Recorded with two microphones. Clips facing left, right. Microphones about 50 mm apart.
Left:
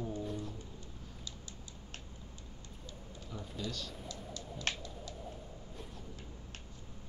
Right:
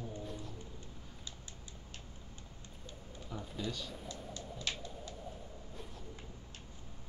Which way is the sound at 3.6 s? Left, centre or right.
Centre.